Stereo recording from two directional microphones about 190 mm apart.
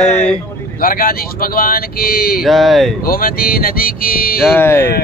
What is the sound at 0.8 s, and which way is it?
Speech, 50° left (ahead or behind).